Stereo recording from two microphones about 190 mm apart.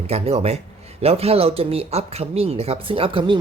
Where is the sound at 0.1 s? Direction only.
35° right (ahead or behind).